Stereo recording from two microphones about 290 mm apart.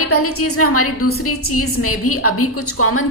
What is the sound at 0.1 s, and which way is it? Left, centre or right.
A woman's voice, left.